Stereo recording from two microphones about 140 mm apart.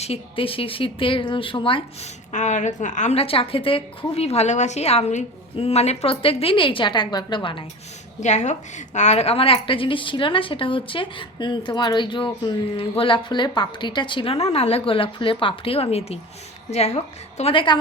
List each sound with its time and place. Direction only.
0.0 s a woman's voice: 45° left (ahead or behind)
2.3 s a woman's voice: 60° left (ahead or behind); by 7.6 s 35° left (ahead or behind)
8.2 s a woman's voice: 55° left (ahead or behind)
17.5 s a woman's voice: 35° left (ahead or behind)